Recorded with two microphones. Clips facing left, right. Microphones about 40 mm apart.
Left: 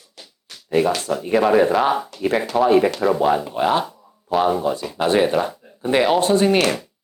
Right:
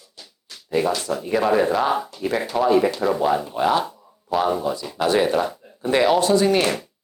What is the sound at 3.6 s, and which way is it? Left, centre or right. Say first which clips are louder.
Speech: left 1 dB; centre.